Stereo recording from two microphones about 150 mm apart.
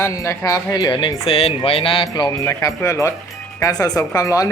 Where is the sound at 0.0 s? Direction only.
20° left (ahead or behind).